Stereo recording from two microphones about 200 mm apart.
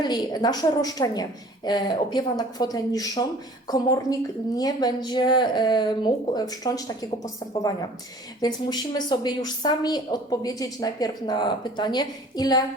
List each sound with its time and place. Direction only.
0.0 s a woman's voice: 20° left (ahead or behind)
8.4 s a woman's voice: 20° left (ahead or behind)